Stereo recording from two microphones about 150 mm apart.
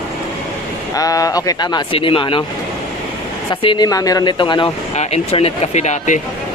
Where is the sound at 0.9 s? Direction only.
25° left (ahead or behind).